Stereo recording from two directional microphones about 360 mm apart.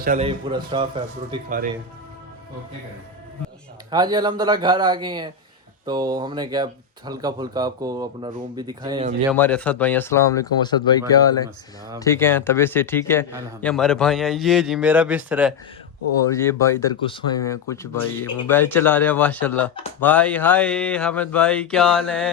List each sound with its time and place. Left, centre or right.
0.0 s speech: centre
3.9 s speech: centre
9.3 s speech: centre
16.3 s speech: centre